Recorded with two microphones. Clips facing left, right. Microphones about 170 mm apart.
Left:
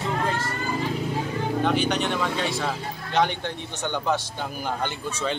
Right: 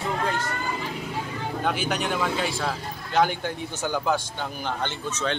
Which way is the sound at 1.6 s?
5° right (ahead or behind).